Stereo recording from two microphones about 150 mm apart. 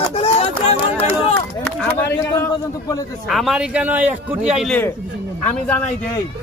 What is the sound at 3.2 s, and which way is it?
A man's voice, centre (ahead or behind).